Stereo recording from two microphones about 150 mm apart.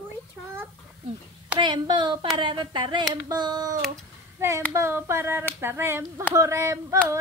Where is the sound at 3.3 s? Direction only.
25° right (ahead or behind).